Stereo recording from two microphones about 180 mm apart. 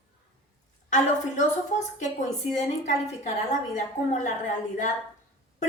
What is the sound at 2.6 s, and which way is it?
Speech, 40° left (ahead or behind).